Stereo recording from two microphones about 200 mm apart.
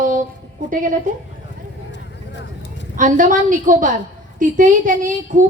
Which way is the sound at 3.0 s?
40° right (ahead or behind).